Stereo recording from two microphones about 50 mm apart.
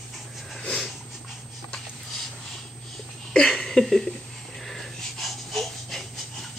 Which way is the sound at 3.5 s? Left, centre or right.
Centre.